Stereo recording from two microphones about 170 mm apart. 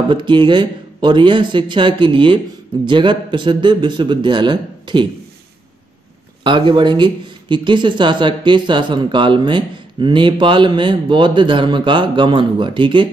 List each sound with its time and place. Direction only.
0.1 s speech: 30° right (ahead or behind)
6.4 s speech: 30° right (ahead or behind)